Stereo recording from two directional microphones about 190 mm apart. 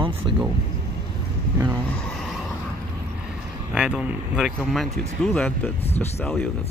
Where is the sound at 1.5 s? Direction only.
15° right (ahead or behind).